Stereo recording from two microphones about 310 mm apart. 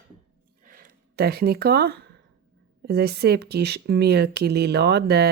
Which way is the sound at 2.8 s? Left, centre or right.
Right.